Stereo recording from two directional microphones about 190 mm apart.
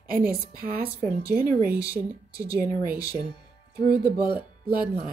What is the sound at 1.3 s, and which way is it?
Speech, 50° right (ahead or behind).